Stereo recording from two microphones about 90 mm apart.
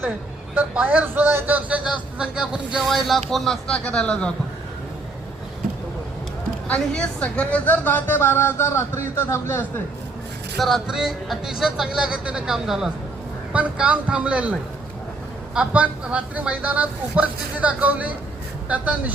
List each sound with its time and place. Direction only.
0.5 s speech: 20° right (ahead or behind); by 4.3 s 10° left (ahead or behind)
6.7 s a woman's voice: 10° left (ahead or behind)
10.6 s speech: centre (ahead or behind)